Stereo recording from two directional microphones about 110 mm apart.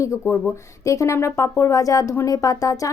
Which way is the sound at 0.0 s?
30° left (ahead or behind).